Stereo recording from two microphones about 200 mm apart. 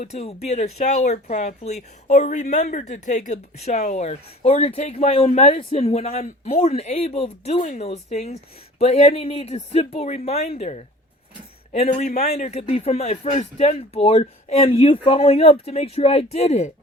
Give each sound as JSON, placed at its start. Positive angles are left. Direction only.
{"t": 0.0, "sound": "speech", "side_deg": 35}
{"t": 11.9, "sound": "speech", "side_deg": 35}